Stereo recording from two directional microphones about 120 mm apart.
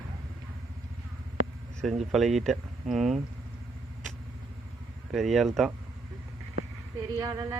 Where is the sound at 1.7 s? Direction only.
Centre (ahead or behind).